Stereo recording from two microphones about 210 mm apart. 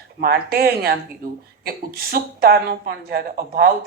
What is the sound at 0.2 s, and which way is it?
Speech, 45° right (ahead or behind).